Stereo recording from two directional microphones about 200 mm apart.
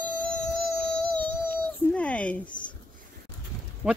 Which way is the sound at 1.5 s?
5° left (ahead or behind).